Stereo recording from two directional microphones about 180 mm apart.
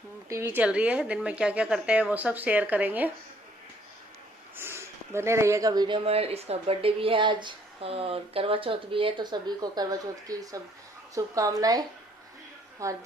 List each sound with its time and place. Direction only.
0.3 s speech: 15° right (ahead or behind)
4.5 s speech: 15° right (ahead or behind)